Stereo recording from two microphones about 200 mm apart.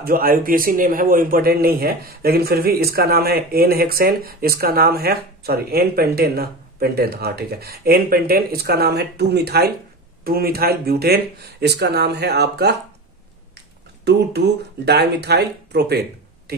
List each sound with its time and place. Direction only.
0.0 s speech: 45° right (ahead or behind)
14.9 s speech: 55° right (ahead or behind)